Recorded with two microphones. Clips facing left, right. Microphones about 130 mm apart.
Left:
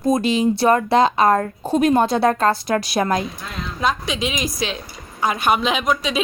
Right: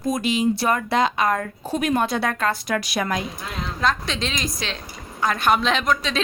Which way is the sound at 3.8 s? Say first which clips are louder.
Left 2 dB; 5° left (ahead or behind).